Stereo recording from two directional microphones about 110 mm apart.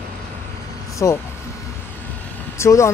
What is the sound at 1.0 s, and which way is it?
Speech, 25° left (ahead or behind).